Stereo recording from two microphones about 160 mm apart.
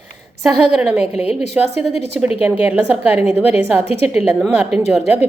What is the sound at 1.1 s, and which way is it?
Speech, 40° left (ahead or behind).